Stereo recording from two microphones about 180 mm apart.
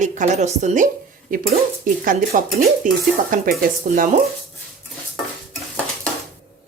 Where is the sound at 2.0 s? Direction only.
50° right (ahead or behind).